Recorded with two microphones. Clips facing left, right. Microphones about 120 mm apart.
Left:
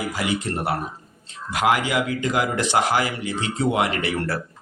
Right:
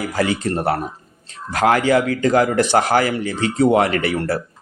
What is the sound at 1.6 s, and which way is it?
Speech, 40° right (ahead or behind).